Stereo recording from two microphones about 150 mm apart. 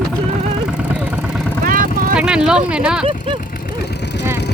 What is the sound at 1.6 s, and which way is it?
Vehicle, 70° right (ahead or behind).